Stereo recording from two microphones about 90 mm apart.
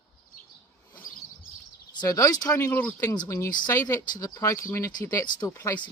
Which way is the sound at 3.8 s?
45° left (ahead or behind).